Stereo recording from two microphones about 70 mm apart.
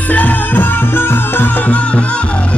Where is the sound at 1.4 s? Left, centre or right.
Left.